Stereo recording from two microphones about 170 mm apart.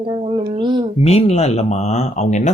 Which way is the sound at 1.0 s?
35° left (ahead or behind).